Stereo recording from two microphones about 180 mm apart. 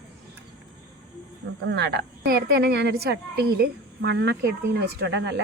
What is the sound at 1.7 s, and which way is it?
A woman's voice, 65° right (ahead or behind).